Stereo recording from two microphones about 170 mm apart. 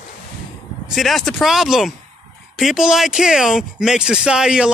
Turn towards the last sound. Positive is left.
turn(degrees=-5)  # may be behind; listen again after turning